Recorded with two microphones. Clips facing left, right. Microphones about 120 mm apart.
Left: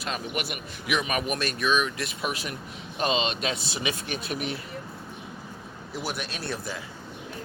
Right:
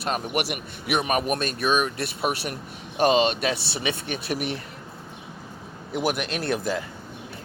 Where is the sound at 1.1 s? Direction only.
45° right (ahead or behind).